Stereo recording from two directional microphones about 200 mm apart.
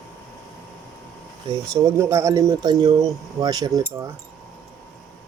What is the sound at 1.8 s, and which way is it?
Speech, 15° right (ahead or behind).